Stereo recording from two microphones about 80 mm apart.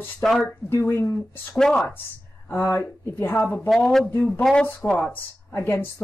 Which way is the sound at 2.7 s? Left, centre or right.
Left.